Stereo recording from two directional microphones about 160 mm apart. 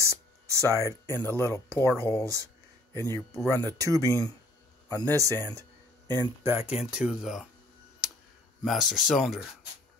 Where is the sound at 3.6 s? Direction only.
20° right (ahead or behind).